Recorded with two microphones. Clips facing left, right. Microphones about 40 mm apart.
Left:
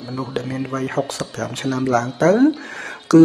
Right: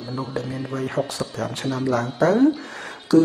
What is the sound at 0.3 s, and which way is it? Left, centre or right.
Speech, left.